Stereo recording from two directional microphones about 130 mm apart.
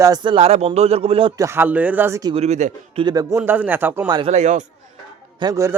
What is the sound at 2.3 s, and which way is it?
Speech, 60° right (ahead or behind).